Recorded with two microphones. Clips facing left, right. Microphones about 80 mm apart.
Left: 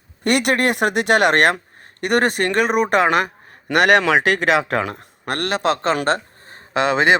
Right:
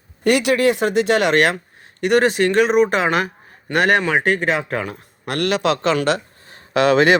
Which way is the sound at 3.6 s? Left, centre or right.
Left.